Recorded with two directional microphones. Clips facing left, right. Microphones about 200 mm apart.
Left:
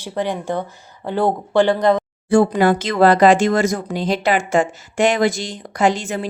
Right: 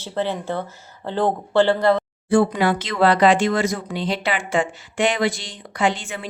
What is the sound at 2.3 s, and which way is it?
Speech, 45° left (ahead or behind).